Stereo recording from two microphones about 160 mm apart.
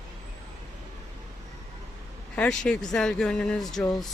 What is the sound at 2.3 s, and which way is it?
Speech, 5° left (ahead or behind).